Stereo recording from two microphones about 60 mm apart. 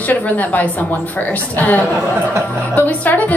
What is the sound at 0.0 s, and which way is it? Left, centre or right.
A woman's voice, left.